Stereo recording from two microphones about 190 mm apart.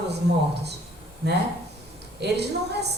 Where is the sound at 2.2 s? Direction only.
60° right (ahead or behind).